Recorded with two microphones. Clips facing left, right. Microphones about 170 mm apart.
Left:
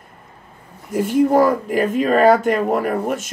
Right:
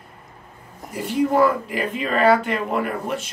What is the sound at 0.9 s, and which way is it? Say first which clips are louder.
Speech: left 5 dB; 45° left (ahead or behind).